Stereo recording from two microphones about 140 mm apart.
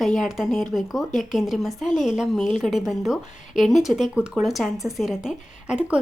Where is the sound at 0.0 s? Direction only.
Centre (ahead or behind).